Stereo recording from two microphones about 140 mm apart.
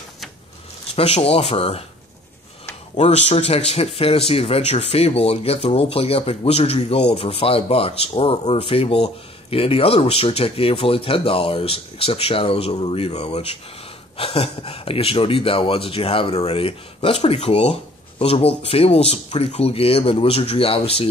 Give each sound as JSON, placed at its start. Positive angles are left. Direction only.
{"t": 0.9, "sound": "speech", "side_deg": 45}
{"t": 3.0, "sound": "speech", "side_deg": 55}